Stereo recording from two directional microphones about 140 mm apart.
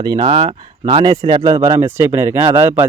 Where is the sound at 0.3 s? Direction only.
40° right (ahead or behind).